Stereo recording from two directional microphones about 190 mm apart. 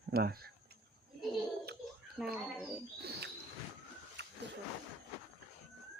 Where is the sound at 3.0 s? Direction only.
55° right (ahead or behind).